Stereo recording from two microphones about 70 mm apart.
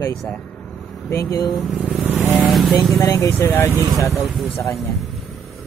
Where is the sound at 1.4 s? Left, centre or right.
Centre.